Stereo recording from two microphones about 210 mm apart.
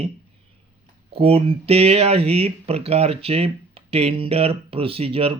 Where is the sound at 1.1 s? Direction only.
25° right (ahead or behind).